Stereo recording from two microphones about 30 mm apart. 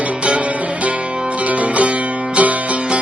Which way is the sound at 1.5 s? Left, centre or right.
Right.